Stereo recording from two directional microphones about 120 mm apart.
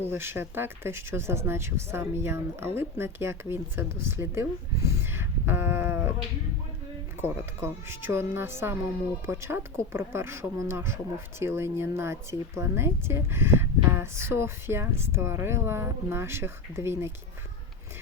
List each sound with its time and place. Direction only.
0.1 s speech: 20° right (ahead or behind)
7.2 s speech: 20° right (ahead or behind)